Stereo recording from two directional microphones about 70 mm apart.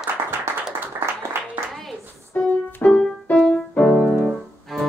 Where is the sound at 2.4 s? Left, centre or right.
Left.